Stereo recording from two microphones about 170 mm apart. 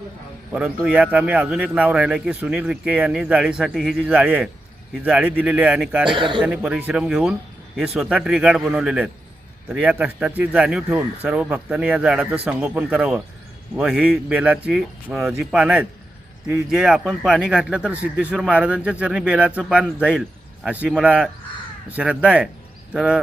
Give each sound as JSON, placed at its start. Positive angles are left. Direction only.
{"t": 0.5, "sound": "a man's voice", "side_deg": -5}
{"t": 6.1, "sound": "a man's voice", "side_deg": -30}
{"t": 6.4, "sound": "a man's voice", "side_deg": -5}